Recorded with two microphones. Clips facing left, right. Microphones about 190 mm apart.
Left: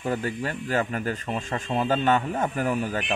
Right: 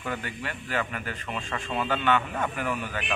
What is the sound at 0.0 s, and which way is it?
Speech, 35° left (ahead or behind).